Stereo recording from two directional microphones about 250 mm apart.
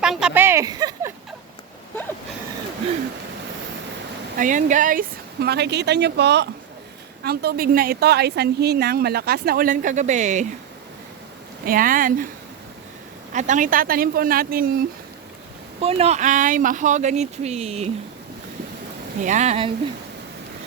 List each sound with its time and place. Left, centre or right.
0.0 s speech: centre
4.4 s a woman's voice: right
11.6 s a woman's voice: right
13.3 s a woman's voice: right
15.8 s speech: right
19.2 s speech: right